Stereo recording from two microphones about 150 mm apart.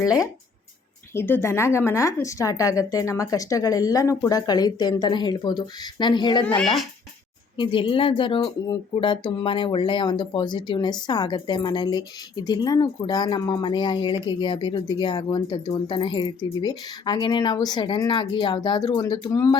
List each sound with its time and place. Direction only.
1.1 s a woman's voice: 15° left (ahead or behind)
6.6 s speech: centre (ahead or behind)
7.5 s speech: 35° left (ahead or behind)